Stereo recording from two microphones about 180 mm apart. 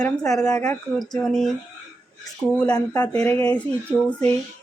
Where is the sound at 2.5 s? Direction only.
5° left (ahead or behind).